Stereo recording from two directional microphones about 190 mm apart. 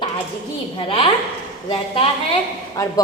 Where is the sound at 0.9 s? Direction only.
30° left (ahead or behind).